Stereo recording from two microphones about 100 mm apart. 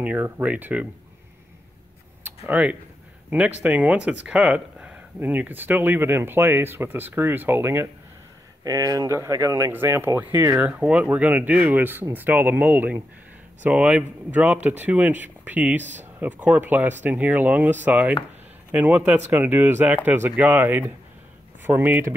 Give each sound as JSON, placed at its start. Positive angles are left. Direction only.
{"t": 0.0, "sound": "speech", "side_deg": -15}
{"t": 2.2, "sound": "speech", "side_deg": -15}
{"t": 8.6, "sound": "speech", "side_deg": -35}
{"t": 10.5, "sound": "speech", "side_deg": -10}